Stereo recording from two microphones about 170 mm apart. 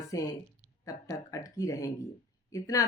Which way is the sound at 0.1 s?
20° left (ahead or behind).